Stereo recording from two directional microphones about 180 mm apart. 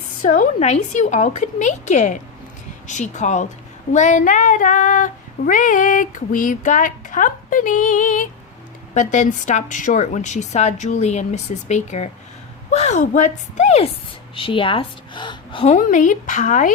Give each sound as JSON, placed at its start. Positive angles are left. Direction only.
{"t": 0.2, "sound": "a woman's voice", "side_deg": 45}
{"t": 3.9, "sound": "female singing", "side_deg": 40}
{"t": 9.0, "sound": "a woman's voice", "side_deg": 40}